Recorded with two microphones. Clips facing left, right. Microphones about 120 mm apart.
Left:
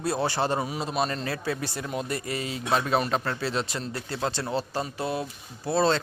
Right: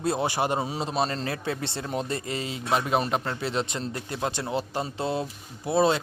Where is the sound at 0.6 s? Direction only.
30° right (ahead or behind).